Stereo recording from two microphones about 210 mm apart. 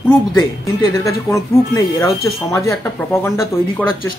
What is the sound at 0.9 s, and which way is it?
Speech, 15° left (ahead or behind).